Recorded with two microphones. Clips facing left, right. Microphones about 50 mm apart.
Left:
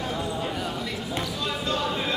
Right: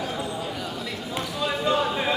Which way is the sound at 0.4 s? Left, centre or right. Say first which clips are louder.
Left 2 dB; centre.